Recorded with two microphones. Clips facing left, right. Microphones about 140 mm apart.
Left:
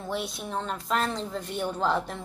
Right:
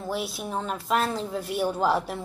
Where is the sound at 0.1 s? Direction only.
5° right (ahead or behind).